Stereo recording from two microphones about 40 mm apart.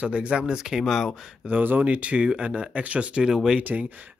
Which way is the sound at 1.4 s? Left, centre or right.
Right.